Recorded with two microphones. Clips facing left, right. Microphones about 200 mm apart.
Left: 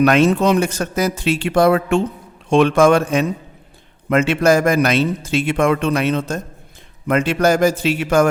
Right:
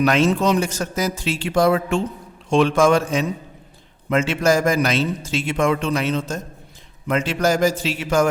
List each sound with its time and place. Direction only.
0.0 s a man's voice: 60° left (ahead or behind)